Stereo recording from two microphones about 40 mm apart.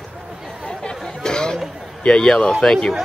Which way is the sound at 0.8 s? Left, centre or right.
Centre.